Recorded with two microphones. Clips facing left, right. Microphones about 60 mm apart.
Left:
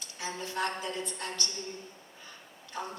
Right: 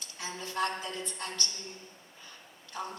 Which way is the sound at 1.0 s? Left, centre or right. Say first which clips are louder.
Left 1 dB; right.